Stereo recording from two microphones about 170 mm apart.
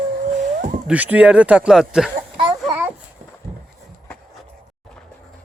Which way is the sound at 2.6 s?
10° right (ahead or behind).